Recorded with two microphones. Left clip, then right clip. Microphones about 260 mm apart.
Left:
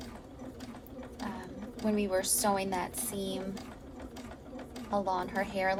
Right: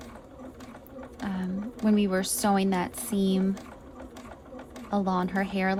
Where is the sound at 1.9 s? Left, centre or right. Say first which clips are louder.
Right 4 dB; right.